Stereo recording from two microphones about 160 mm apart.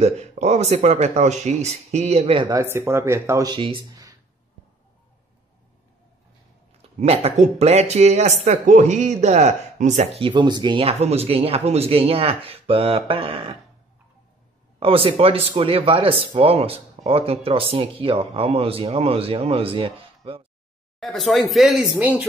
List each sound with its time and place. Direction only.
0.0 s speech: 40° right (ahead or behind)
2.5 s speech: 15° right (ahead or behind)
3.5 s speech: 30° right (ahead or behind)
7.0 s speech: 45° right (ahead or behind)
10.2 s speech: 30° right (ahead or behind)
14.8 s speech: 35° right (ahead or behind)
21.0 s speech: centre (ahead or behind)